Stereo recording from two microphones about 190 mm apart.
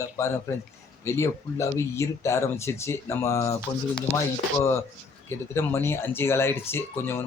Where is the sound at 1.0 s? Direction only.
15° left (ahead or behind).